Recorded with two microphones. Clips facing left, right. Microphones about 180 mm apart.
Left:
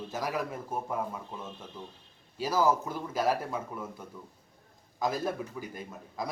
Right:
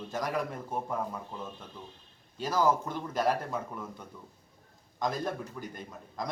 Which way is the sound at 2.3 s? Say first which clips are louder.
Left 1 dB; 5° left (ahead or behind).